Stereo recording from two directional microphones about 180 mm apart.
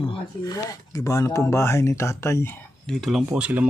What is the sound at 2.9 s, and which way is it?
Speech, centre (ahead or behind).